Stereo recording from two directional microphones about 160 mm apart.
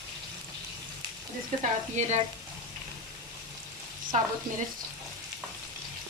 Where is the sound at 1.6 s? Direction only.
45° right (ahead or behind).